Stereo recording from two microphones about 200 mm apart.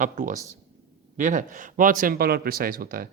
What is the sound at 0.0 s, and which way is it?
A man's voice, 40° right (ahead or behind).